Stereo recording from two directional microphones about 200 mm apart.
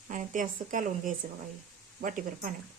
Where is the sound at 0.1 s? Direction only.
40° right (ahead or behind).